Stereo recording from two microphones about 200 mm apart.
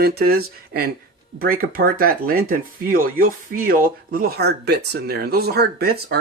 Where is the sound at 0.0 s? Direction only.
50° right (ahead or behind).